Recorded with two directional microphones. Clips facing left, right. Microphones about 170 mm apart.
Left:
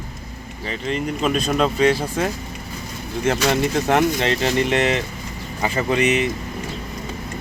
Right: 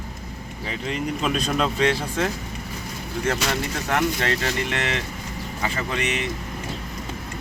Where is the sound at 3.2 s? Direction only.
20° left (ahead or behind).